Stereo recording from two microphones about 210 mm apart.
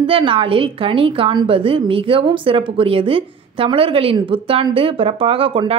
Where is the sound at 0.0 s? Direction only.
25° right (ahead or behind).